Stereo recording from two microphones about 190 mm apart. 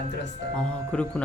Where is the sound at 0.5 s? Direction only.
5° left (ahead or behind).